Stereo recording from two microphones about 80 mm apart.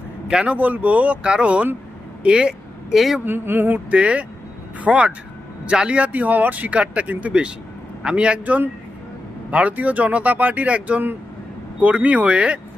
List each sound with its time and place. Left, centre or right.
0.3 s speech: centre
3.2 s speech: right